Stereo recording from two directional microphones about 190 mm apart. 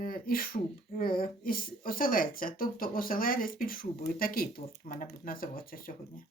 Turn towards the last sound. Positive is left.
turn(degrees=45)  # may be behind; listen again after turning